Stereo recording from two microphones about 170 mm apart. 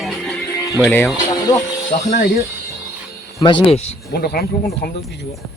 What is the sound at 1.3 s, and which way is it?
Speech, 20° left (ahead or behind).